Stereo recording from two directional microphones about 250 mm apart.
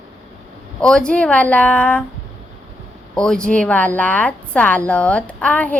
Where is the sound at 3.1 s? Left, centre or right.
Centre.